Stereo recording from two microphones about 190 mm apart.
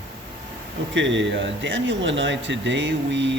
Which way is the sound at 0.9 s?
75° right (ahead or behind).